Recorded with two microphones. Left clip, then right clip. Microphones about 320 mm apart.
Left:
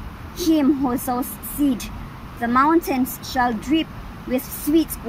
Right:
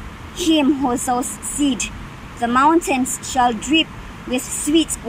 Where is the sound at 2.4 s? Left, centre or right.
Centre.